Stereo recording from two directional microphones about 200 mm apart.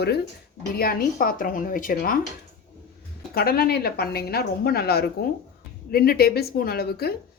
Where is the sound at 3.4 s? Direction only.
50° left (ahead or behind).